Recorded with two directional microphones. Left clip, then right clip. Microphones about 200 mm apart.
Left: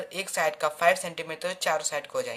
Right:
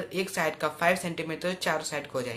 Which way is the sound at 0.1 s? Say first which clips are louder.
Left 2 dB; 35° left (ahead or behind).